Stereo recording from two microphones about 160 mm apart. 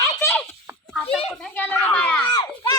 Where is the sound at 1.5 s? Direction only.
10° left (ahead or behind).